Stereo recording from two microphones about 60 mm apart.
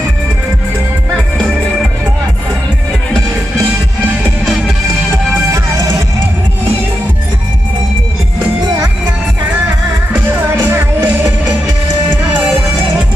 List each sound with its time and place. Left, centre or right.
10.2 s music: right